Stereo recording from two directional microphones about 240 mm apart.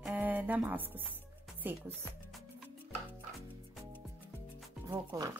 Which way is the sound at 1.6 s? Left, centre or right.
Centre.